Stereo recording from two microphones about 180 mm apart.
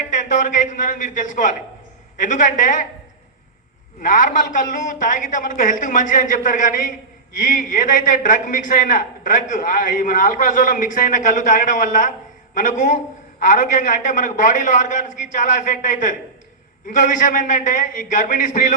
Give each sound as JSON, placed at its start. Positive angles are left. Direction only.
{"t": 0.1, "sound": "a man's voice", "side_deg": 45}
{"t": 4.0, "sound": "a man's voice", "side_deg": 45}